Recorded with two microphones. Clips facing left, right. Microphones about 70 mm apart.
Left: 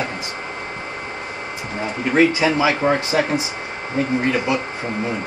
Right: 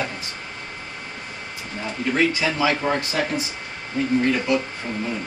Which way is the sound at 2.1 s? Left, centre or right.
Left.